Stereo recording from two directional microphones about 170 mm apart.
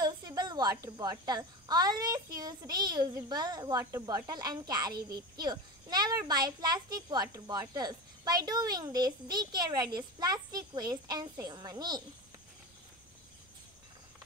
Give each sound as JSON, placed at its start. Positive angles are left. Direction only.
{"t": 0.0, "sound": "a child's voice", "side_deg": -25}